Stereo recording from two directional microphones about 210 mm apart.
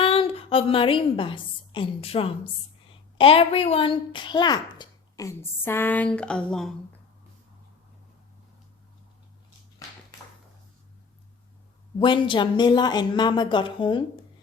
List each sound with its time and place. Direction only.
0.0 s a woman's voice: 25° left (ahead or behind); by 6.7 s centre (ahead or behind)
11.9 s speech: 25° left (ahead or behind)